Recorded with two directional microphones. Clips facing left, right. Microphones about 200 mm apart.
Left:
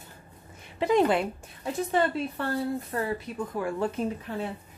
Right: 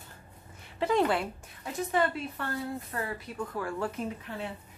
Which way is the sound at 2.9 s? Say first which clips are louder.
Left 5 dB; 30° left (ahead or behind).